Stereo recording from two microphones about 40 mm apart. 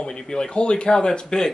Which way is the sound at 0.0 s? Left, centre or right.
Centre.